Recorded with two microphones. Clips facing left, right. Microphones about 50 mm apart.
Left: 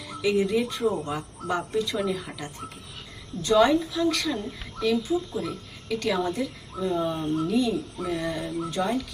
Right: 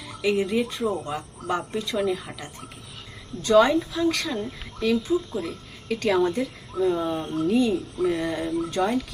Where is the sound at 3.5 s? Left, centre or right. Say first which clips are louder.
Right 2 dB; right.